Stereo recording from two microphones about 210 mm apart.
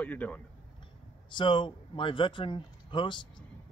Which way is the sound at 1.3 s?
25° left (ahead or behind).